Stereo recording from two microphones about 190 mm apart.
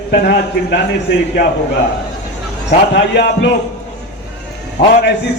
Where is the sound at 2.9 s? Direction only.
65° left (ahead or behind).